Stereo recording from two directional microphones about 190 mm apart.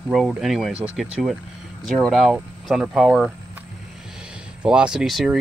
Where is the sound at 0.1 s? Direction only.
Centre (ahead or behind).